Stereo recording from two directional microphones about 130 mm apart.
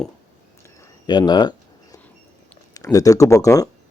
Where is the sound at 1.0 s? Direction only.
35° left (ahead or behind).